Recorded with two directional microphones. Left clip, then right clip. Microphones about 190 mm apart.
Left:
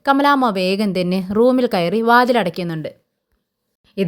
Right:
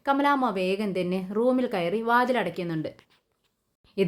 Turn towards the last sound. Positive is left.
turn(degrees=30)  # may be behind; listen again after turning